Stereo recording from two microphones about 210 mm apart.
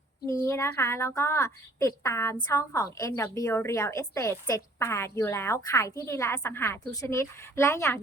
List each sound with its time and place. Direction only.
0.3 s a woman's voice: 15° left (ahead or behind)